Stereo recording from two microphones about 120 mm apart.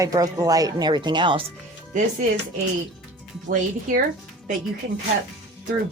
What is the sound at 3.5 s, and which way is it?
Speech, 90° right.